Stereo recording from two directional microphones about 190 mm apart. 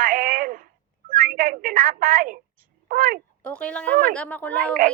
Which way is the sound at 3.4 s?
5° left (ahead or behind).